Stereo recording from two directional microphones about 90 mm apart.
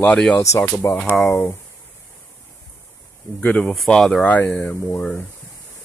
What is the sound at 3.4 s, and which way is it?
Speech, 15° left (ahead or behind).